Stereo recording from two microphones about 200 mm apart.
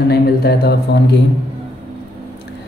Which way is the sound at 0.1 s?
50° left (ahead or behind).